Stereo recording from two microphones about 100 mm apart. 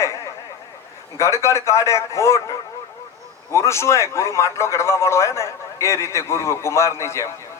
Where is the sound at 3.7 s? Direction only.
30° left (ahead or behind).